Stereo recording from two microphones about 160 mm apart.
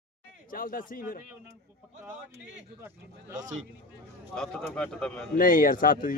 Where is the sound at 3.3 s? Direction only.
50° right (ahead or behind).